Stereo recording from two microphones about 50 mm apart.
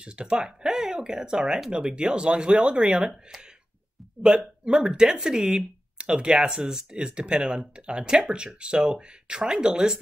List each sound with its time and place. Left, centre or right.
0.0 s speech: right
4.2 s speech: centre